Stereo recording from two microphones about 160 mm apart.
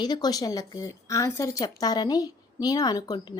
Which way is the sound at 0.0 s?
25° left (ahead or behind).